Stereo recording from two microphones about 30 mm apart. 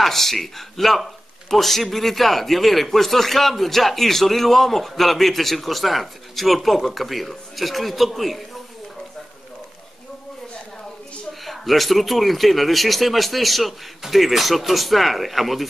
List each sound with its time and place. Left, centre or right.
0.0 s a man's voice: centre
11.4 s a man's voice: centre